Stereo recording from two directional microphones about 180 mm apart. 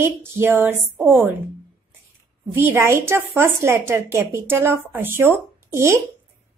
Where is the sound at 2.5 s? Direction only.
15° right (ahead or behind).